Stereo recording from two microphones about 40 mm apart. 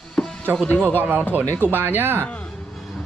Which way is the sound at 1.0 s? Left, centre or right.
Right.